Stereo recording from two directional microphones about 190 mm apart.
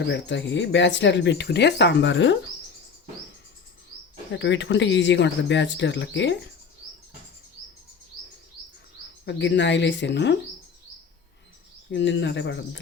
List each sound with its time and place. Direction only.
0.1 s speech: 70° left (ahead or behind)
4.3 s speech: 70° left (ahead or behind)
9.2 s speech: 65° left (ahead or behind)
11.9 s speech: 70° left (ahead or behind)